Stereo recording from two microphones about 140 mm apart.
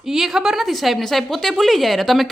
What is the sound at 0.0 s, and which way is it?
A woman's voice, centre (ahead or behind).